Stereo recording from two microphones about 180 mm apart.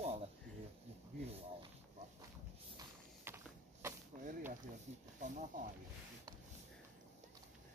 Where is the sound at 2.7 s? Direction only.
15° right (ahead or behind).